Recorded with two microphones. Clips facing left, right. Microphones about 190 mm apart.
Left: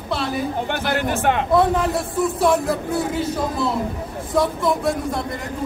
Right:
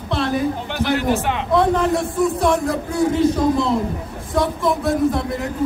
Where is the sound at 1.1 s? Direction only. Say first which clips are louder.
Even; 50° left (ahead or behind).